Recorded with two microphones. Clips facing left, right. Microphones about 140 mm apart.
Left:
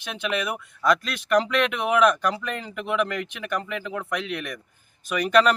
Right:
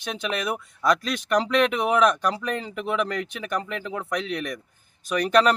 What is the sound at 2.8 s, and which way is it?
Speech, centre (ahead or behind).